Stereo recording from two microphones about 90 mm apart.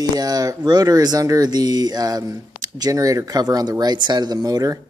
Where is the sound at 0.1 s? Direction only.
45° right (ahead or behind).